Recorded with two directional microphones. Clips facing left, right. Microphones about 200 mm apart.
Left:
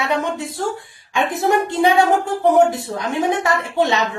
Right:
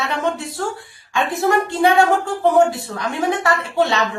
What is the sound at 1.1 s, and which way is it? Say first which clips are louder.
A man's voice: even; 15° left (ahead or behind).